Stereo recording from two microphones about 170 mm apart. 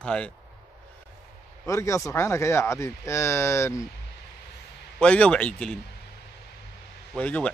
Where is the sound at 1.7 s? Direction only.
15° left (ahead or behind).